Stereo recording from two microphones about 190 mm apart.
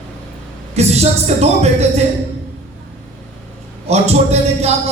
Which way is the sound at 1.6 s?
35° right (ahead or behind).